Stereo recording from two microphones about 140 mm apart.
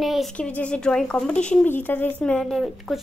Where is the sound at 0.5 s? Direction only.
10° left (ahead or behind).